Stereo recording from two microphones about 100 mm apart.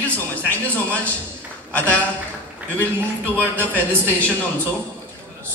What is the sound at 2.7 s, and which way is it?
A man's voice, 15° left (ahead or behind).